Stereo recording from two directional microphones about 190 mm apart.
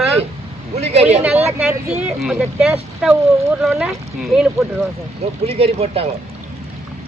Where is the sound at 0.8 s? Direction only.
35° right (ahead or behind).